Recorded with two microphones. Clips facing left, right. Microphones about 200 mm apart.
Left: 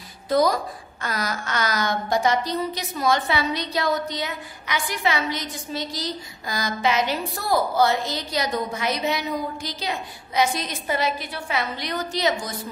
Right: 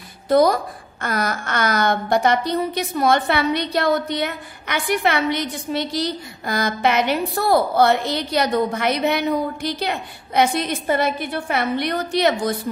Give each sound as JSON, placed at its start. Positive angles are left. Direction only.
{"t": 0.3, "sound": "a woman's voice", "side_deg": -55}